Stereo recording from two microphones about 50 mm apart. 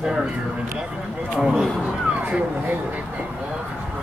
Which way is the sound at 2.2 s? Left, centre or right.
Right.